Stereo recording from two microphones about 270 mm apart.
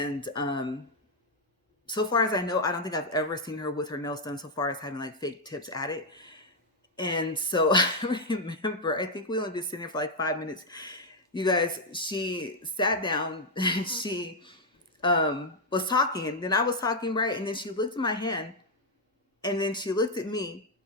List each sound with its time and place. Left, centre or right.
0.0 s speech: centre
1.9 s speech: centre